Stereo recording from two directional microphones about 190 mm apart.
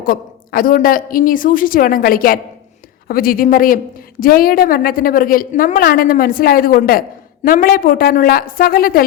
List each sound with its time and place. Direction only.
0.0 s a woman's voice: 50° left (ahead or behind)